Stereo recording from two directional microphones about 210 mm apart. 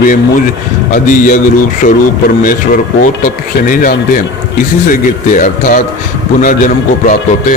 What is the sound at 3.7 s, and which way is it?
A man's voice, 40° left (ahead or behind).